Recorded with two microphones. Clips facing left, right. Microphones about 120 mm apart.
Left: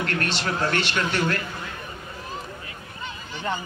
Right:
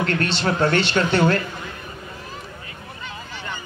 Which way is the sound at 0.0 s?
30° right (ahead or behind).